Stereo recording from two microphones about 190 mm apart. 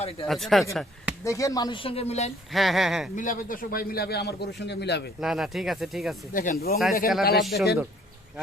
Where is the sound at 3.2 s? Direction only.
45° left (ahead or behind); by 5.0 s 60° left (ahead or behind).